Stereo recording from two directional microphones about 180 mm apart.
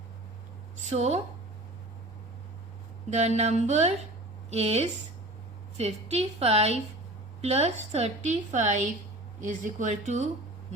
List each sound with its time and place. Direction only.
0.8 s a woman's voice: 40° right (ahead or behind)
3.1 s a woman's voice: 40° right (ahead or behind)